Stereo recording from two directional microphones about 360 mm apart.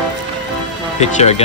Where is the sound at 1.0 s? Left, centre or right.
Centre.